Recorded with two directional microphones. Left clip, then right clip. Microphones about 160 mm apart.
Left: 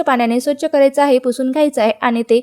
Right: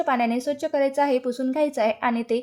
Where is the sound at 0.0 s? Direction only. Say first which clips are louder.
Left 8 dB; 35° left (ahead or behind).